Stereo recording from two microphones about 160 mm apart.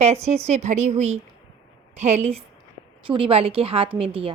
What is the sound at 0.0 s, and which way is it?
A woman's voice, 45° right (ahead or behind).